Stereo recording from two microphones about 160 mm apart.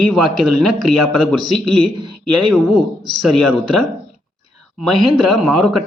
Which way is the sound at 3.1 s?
5° left (ahead or behind).